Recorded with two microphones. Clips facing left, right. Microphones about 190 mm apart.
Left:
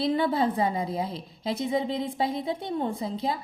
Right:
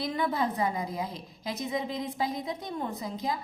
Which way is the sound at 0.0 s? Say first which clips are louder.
Left 5 dB; 30° left (ahead or behind).